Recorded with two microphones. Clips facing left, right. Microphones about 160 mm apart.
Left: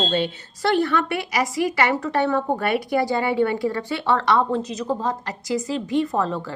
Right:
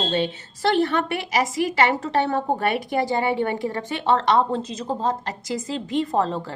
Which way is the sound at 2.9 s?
20° right (ahead or behind).